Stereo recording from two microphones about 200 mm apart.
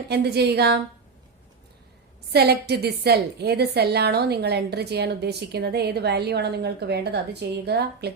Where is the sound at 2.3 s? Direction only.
55° right (ahead or behind).